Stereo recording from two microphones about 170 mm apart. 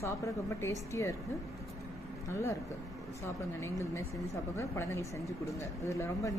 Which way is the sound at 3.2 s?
15° left (ahead or behind).